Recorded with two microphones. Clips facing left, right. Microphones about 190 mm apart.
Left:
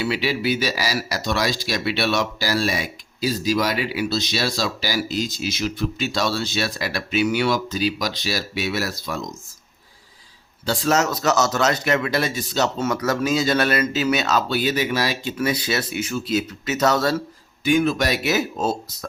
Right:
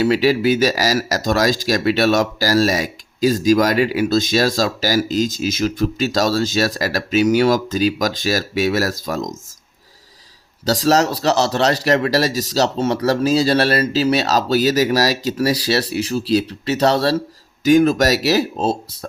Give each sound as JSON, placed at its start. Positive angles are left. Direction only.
{"t": 0.0, "sound": "speech", "side_deg": -45}
{"t": 10.7, "sound": "a man's voice", "side_deg": -35}